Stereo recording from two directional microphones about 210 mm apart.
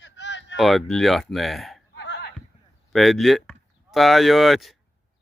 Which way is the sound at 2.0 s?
55° left (ahead or behind).